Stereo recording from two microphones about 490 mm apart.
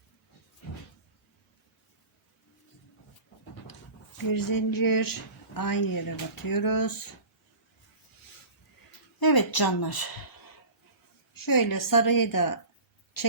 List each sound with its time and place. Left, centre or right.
4.3 s speech: left
9.2 s speech: left
11.3 s speech: left
13.2 s a sound: left